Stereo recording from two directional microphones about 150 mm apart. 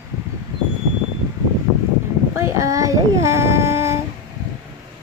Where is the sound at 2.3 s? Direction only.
20° right (ahead or behind).